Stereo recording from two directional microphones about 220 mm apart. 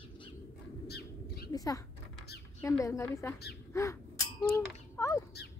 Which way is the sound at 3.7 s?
15° left (ahead or behind).